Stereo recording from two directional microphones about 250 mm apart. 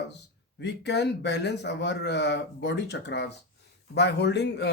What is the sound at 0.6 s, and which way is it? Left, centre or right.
Speech, left.